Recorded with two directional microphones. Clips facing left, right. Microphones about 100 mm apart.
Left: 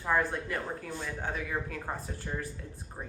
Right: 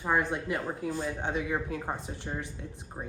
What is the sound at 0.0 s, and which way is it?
Speech, 20° right (ahead or behind).